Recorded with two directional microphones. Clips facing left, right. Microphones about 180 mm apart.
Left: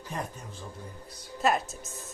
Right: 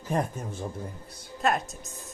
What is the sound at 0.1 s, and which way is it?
Speech, 50° right (ahead or behind).